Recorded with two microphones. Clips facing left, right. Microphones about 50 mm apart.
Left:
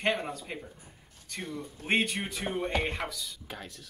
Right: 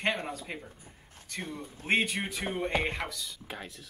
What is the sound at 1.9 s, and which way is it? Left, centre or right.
Speech, centre.